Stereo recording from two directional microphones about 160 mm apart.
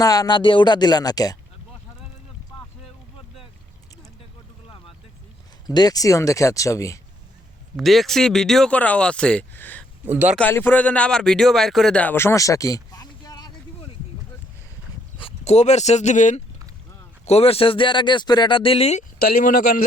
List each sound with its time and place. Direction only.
0.0 s speech: 25° left (ahead or behind)
5.6 s speech: 25° left (ahead or behind)
7.8 s speech: centre (ahead or behind)
10.1 s speech: 10° right (ahead or behind)
10.3 s speech: 10° left (ahead or behind); by 13.9 s 25° left (ahead or behind)
15.2 s speech: 40° left (ahead or behind)
19.2 s speech: 60° left (ahead or behind)